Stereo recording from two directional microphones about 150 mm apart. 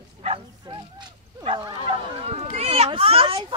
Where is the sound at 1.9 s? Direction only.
45° right (ahead or behind).